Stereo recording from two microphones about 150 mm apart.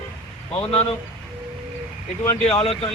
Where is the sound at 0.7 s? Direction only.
40° left (ahead or behind).